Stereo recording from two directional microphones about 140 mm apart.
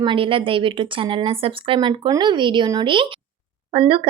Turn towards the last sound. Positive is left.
turn(degrees=-40)  # may be behind; listen again after turning